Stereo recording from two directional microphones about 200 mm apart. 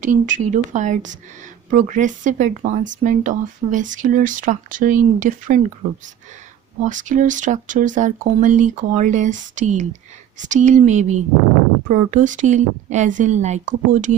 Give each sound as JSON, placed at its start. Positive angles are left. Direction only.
{"t": 0.0, "sound": "speech", "side_deg": -40}
{"t": 6.8, "sound": "speech", "side_deg": -40}